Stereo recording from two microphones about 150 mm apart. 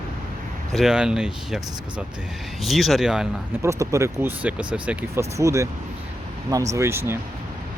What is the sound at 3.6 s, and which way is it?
Speech, 20° right (ahead or behind).